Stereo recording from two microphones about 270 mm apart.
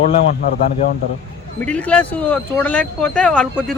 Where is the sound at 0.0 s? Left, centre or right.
Left.